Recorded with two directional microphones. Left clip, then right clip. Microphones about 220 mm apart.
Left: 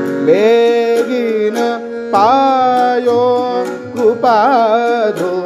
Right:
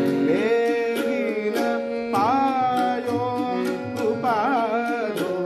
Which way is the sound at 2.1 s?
50° left (ahead or behind).